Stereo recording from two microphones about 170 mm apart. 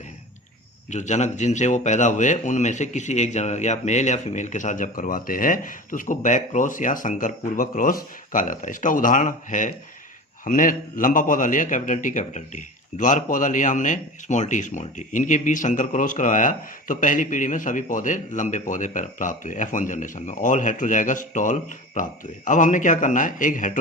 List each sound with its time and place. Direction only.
0.9 s speech: 45° left (ahead or behind)